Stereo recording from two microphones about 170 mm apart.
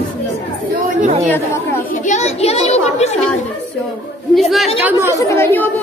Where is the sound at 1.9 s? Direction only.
45° left (ahead or behind).